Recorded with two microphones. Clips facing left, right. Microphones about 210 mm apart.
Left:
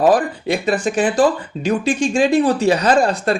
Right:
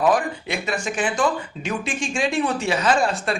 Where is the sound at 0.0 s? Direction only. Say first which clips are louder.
Left 5 dB; 35° left (ahead or behind).